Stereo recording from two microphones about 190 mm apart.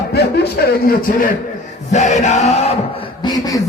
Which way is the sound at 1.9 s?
40° left (ahead or behind).